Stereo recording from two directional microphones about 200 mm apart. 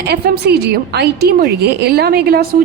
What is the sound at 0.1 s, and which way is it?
A woman's voice, 55° right (ahead or behind).